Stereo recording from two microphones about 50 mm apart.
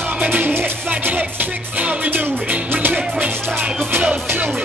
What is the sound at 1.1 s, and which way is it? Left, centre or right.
Music, right.